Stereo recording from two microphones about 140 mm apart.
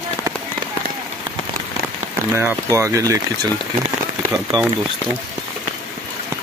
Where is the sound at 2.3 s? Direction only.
20° right (ahead or behind).